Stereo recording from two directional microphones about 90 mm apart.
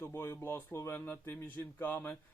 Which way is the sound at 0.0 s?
30° left (ahead or behind).